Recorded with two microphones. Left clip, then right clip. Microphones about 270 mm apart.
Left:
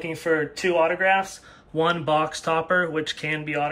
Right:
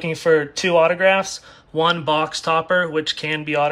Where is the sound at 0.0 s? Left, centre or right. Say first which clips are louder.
Right 6 dB; centre.